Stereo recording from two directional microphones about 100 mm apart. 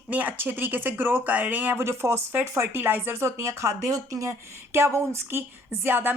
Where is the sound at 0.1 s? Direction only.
15° right (ahead or behind).